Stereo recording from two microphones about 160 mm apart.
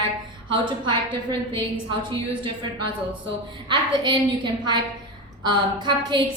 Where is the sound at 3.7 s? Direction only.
30° right (ahead or behind).